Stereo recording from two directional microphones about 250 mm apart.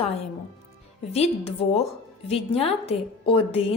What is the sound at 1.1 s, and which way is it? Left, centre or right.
A woman's voice, left.